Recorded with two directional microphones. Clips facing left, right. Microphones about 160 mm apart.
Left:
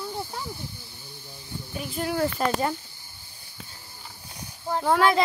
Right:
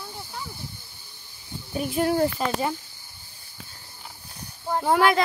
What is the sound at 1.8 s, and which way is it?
Speech, 55° right (ahead or behind).